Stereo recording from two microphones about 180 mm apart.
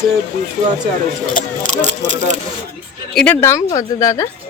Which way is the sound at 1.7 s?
40° right (ahead or behind).